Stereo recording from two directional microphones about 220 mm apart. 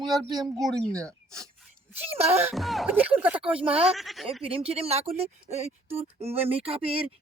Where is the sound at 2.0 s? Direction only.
25° right (ahead or behind).